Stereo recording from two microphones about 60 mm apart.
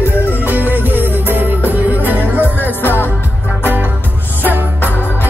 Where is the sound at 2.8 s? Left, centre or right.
Left.